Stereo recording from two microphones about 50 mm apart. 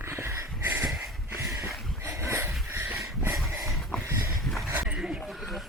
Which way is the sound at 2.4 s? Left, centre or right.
Right.